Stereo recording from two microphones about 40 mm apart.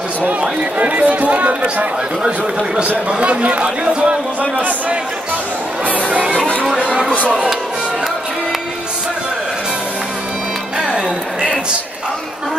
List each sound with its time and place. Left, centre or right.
0.2 s a man's voice: right
5.9 s music: right
6.8 s a sound: right